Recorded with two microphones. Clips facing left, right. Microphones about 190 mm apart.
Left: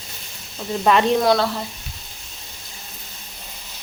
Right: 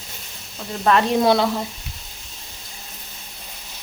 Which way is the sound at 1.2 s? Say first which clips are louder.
Right 1 dB; 15° right (ahead or behind).